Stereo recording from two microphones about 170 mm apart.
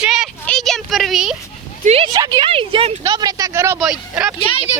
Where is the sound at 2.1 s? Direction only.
20° right (ahead or behind).